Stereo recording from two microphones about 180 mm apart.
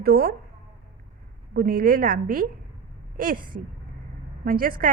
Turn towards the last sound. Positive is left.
turn(degrees=-55)  # may be behind; listen again after turning